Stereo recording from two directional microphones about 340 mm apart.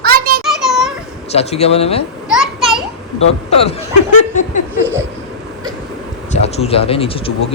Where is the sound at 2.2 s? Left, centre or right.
Centre.